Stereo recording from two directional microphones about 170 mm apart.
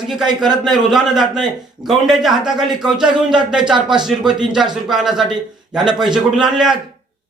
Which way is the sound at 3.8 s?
25° right (ahead or behind).